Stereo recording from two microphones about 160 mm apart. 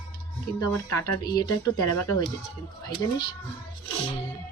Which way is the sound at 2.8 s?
25° left (ahead or behind).